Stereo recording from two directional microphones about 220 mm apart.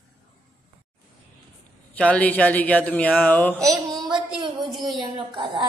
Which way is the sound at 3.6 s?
15° right (ahead or behind).